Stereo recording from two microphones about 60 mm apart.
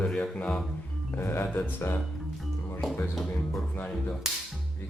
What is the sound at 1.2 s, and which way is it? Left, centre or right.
Speech, left.